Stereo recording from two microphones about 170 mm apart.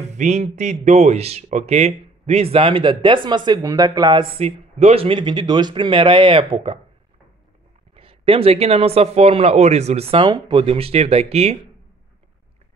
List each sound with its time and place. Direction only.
0.0 s speech: 40° right (ahead or behind)
7.9 s speech: 35° right (ahead or behind)